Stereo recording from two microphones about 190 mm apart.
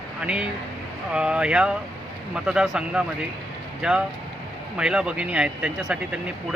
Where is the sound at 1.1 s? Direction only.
5° right (ahead or behind).